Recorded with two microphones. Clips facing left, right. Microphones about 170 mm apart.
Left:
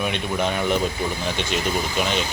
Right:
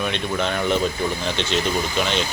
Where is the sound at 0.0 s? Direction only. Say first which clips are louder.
Even; 10° left (ahead or behind).